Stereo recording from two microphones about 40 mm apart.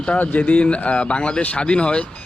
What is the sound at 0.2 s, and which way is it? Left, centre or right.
Speech, left.